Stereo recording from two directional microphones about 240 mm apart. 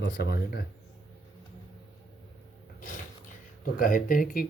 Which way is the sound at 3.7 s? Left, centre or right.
Left.